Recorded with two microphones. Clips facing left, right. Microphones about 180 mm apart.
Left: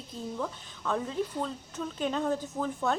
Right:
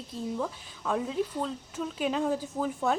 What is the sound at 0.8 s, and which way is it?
Speech, 5° right (ahead or behind).